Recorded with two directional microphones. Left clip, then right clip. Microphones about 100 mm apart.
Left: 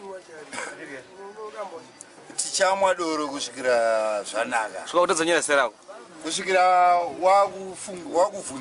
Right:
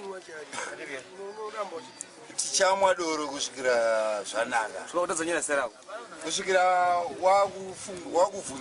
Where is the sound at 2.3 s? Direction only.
Centre (ahead or behind).